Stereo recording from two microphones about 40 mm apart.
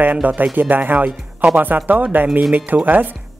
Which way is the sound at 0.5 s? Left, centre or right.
Right.